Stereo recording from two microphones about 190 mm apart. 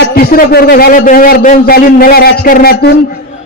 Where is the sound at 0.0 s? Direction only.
50° left (ahead or behind).